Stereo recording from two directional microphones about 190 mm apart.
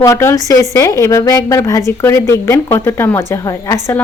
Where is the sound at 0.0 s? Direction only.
15° left (ahead or behind).